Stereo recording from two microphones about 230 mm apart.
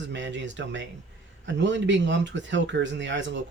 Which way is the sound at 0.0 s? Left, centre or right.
Right.